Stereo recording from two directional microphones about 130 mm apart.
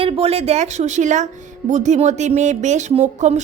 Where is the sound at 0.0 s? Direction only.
50° right (ahead or behind).